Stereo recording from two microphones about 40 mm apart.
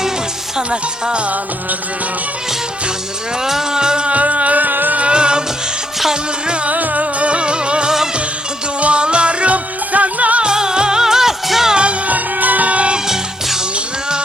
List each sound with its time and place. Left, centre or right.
0.5 s speech: centre
3.4 s speech: centre
4.1 s music: right
4.9 s music: right
6.7 s music: right
10.4 s music: centre
11.7 s music: right
12.0 s music: right